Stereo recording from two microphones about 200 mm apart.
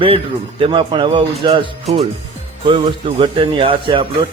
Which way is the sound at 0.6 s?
25° right (ahead or behind).